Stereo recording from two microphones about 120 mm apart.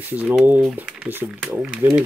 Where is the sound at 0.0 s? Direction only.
15° right (ahead or behind).